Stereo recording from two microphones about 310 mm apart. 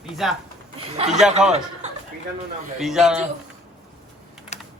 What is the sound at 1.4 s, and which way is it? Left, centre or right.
Speech, centre.